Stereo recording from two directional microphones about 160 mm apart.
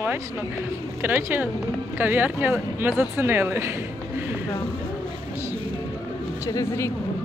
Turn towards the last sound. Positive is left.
turn(degrees=20)  # may be behind; listen again after turning